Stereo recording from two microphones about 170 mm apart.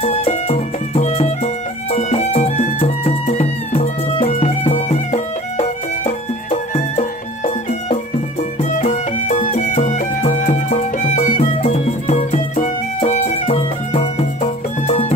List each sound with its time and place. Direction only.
0.0 s music: 35° left (ahead or behind)